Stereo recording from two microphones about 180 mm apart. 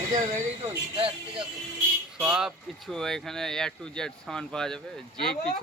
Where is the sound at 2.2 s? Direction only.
5° right (ahead or behind).